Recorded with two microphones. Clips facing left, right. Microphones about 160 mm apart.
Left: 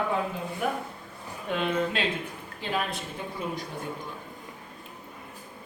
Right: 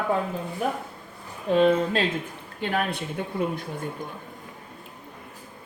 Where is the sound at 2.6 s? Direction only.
60° right (ahead or behind).